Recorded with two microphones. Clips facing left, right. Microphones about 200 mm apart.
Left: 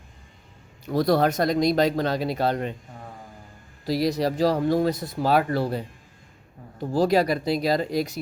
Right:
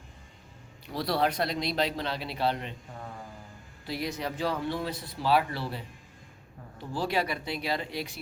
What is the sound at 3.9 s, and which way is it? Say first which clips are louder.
Speech: left 10 dB; 35° left (ahead or behind).